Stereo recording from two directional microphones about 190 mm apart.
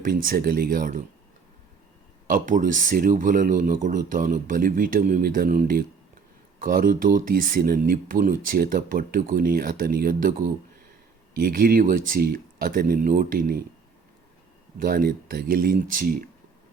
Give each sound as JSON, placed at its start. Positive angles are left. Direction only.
{"t": 0.0, "sound": "speech", "side_deg": -45}
{"t": 2.2, "sound": "speech", "side_deg": -45}
{"t": 14.8, "sound": "speech", "side_deg": -50}